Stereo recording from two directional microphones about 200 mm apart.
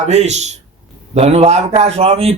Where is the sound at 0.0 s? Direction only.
35° right (ahead or behind).